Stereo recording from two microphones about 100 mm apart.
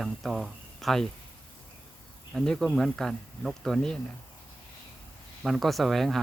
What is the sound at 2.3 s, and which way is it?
Speech, 5° left (ahead or behind).